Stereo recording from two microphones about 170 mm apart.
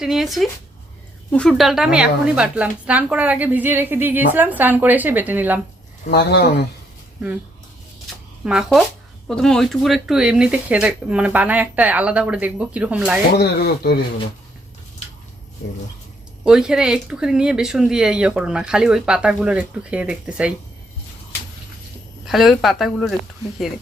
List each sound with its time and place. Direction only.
0.0 s a woman's voice: centre (ahead or behind)
6.1 s speech: 80° left
8.4 s a woman's voice: 5° right (ahead or behind)
13.3 s speech: 70° left (ahead or behind)
16.4 s speech: 5° right (ahead or behind)
22.3 s speech: centre (ahead or behind)